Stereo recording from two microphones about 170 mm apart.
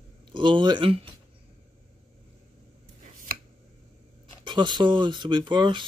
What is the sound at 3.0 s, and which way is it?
Chopping, 50° right (ahead or behind).